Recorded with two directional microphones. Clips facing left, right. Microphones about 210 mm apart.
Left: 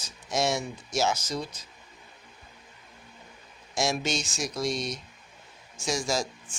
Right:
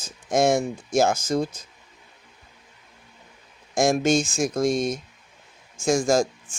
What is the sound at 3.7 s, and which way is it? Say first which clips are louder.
Speech: right 9 dB; 50° right (ahead or behind).